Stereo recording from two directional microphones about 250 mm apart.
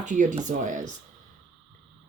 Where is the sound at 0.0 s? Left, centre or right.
Right.